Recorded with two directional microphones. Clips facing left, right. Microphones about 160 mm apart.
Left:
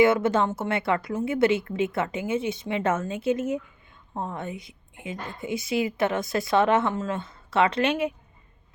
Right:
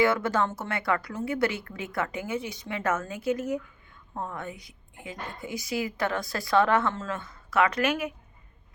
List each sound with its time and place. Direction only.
0.0 s a woman's voice: 25° left (ahead or behind)